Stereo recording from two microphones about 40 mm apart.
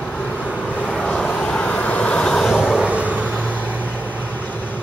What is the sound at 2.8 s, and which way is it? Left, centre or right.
Vehicle, right.